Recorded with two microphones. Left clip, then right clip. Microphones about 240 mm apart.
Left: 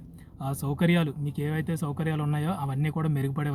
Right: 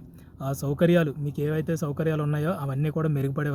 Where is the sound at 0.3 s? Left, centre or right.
Centre.